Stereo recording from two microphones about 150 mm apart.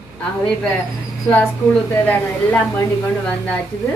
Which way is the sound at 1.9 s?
15° left (ahead or behind).